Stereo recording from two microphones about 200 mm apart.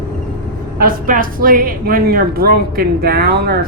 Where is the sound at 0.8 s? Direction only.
45° right (ahead or behind).